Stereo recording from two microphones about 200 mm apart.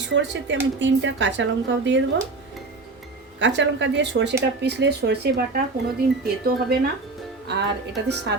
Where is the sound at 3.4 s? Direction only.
65° right (ahead or behind).